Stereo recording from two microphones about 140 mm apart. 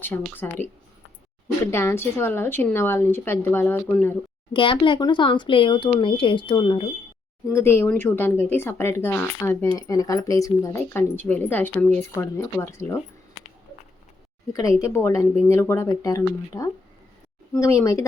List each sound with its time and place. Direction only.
0.1 s speech: 15° left (ahead or behind)
1.6 s speech: 20° left (ahead or behind)
4.5 s speech: 35° left (ahead or behind)
7.4 s speech: 20° left (ahead or behind)
14.5 s speech: 25° left (ahead or behind)